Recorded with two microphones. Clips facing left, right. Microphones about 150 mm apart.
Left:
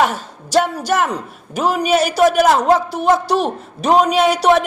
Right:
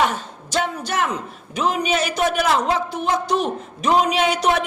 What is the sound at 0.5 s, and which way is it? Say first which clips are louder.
A woman's voice: left 7 dB; 40° left (ahead or behind).